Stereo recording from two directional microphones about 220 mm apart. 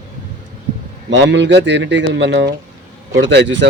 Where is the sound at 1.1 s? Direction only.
55° right (ahead or behind).